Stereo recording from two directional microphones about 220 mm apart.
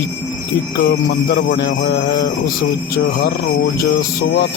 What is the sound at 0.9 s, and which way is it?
Speech, 40° left (ahead or behind).